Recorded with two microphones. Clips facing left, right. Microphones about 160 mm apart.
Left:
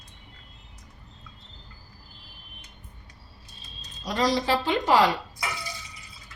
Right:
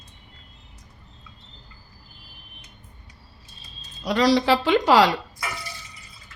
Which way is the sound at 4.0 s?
70° right (ahead or behind).